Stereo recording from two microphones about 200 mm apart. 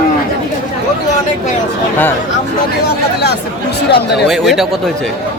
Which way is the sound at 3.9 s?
55° left (ahead or behind).